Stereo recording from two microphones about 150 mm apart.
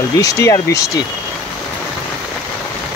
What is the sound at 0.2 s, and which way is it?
Speech, 20° left (ahead or behind).